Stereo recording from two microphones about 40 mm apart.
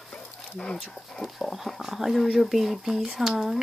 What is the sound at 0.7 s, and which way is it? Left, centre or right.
Speech, centre.